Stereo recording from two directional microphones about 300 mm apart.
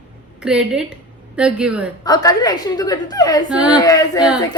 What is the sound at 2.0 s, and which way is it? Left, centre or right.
A woman's voice, centre.